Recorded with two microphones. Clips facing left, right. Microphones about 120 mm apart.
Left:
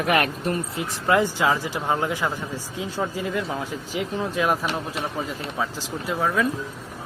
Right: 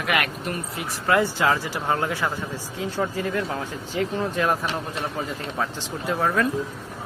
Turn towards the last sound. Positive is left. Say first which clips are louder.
# even
turn(degrees=0)  # may be behind; listen again after turning